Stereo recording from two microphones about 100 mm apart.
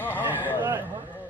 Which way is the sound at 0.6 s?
25° right (ahead or behind).